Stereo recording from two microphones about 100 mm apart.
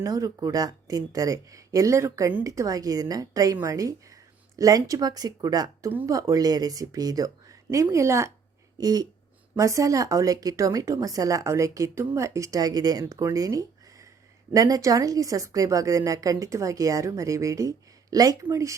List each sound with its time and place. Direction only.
0.0 s speech: 35° right (ahead or behind)
8.8 s speech: 40° right (ahead or behind)